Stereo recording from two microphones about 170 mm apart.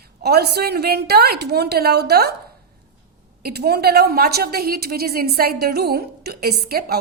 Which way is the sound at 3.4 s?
70° right (ahead or behind).